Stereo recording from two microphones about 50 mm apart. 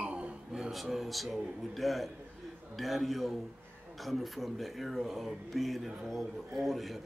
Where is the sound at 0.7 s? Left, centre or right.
Centre.